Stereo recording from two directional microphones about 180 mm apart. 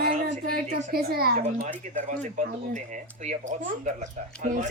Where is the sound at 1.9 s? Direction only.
45° right (ahead or behind).